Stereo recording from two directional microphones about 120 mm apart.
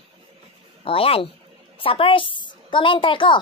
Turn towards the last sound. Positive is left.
turn(degrees=45)  # may be behind; listen again after turning